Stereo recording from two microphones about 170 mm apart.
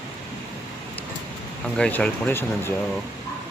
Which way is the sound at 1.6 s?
5° left (ahead or behind).